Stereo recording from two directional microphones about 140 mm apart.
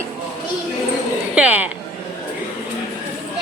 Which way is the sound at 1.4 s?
10° right (ahead or behind).